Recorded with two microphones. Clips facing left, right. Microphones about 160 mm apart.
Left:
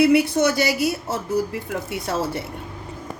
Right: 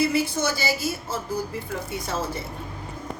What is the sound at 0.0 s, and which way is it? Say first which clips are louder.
A woman's voice: left 7 dB; 65° left (ahead or behind).